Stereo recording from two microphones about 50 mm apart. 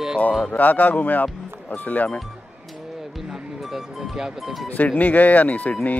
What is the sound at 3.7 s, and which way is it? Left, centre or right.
Music, centre.